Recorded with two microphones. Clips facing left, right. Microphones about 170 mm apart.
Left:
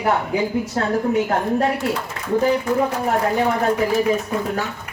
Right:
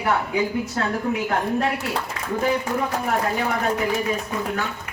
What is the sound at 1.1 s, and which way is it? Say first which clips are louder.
Speech: left 4 dB; 35° left (ahead or behind).